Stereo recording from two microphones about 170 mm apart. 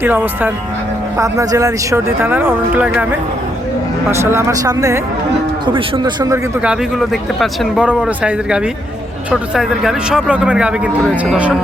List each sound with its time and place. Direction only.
0.0 s speech: 10° right (ahead or behind)
6.3 s speech: 5° right (ahead or behind)